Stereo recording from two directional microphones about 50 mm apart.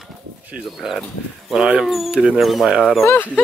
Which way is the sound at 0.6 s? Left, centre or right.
Centre.